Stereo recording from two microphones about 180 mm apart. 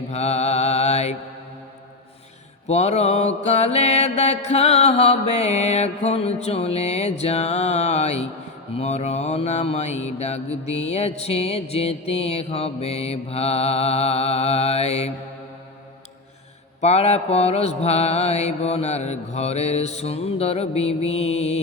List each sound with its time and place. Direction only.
0.1 s mantra: 40° left (ahead or behind)
2.6 s mantra: 35° left (ahead or behind)
16.8 s mantra: 35° left (ahead or behind)